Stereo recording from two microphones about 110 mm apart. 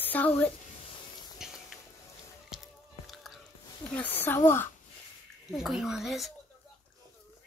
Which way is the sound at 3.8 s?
15° left (ahead or behind).